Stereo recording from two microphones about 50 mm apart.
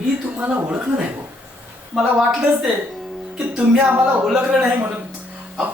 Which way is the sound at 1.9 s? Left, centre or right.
Centre.